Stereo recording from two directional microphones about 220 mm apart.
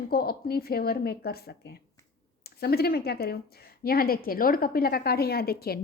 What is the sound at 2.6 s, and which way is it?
A woman's voice, 45° left (ahead or behind).